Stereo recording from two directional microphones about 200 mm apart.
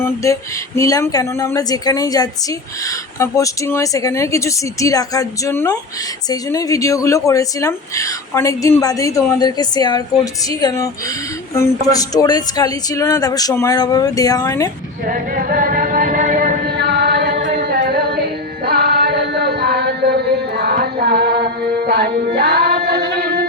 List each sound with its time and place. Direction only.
0.0 s a sound: 15° left (ahead or behind)
0.8 s a woman's voice: 15° left (ahead or behind)
15.0 s music: 45° right (ahead or behind)